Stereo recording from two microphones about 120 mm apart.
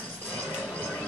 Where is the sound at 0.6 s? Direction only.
10° left (ahead or behind).